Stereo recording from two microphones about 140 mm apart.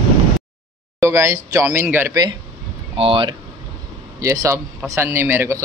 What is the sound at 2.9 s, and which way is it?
Speech, 40° right (ahead or behind).